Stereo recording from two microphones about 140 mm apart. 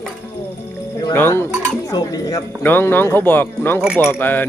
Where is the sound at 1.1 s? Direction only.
15° left (ahead or behind).